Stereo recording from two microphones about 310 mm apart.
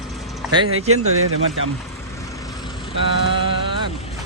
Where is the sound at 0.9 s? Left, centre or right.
Right.